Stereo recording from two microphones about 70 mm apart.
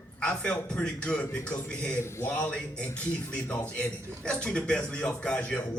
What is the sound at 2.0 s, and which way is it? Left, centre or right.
Speech, left.